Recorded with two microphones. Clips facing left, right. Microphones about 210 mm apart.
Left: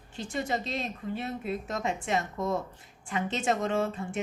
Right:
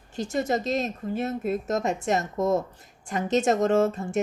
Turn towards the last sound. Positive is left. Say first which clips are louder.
# right 7 dB
turn(degrees=-45)  # may be behind; listen again after turning